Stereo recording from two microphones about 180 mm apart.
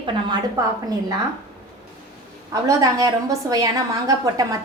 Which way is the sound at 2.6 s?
20° right (ahead or behind).